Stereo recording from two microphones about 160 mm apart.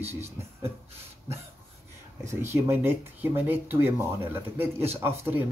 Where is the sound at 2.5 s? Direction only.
15° right (ahead or behind).